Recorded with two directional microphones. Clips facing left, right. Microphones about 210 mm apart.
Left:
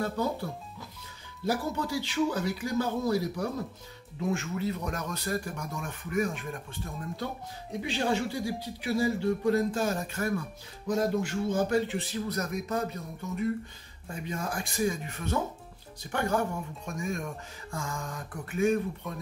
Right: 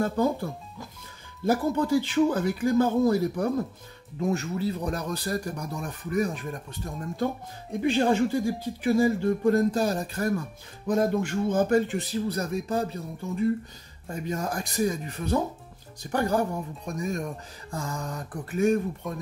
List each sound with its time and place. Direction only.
1.4 s speech: 50° right (ahead or behind)
4.2 s speech: 40° right (ahead or behind)
7.8 s speech: 50° right (ahead or behind)
10.9 s speech: 55° right (ahead or behind); by 13.5 s 30° right (ahead or behind)
14.0 s speech: 40° right (ahead or behind)